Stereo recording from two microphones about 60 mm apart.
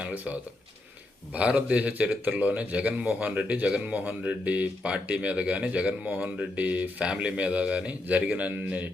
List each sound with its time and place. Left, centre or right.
0.0 s speech: right